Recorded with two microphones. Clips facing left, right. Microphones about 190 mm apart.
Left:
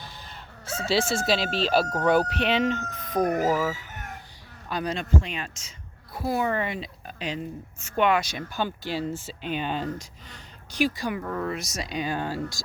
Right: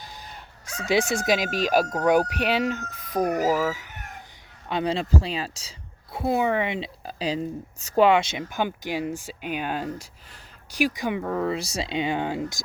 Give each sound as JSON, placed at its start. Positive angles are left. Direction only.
{"t": 0.6, "sound": "speech", "side_deg": -15}
{"t": 4.7, "sound": "speech", "side_deg": -25}
{"t": 6.1, "sound": "speech", "side_deg": -20}